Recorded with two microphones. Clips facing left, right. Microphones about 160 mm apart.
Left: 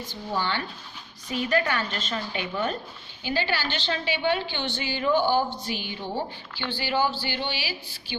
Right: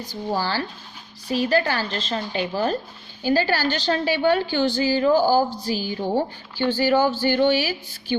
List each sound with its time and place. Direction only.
0.3 s a woman's voice: 35° right (ahead or behind)